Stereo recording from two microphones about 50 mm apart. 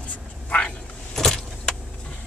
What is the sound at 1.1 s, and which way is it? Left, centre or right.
Vehicle, centre.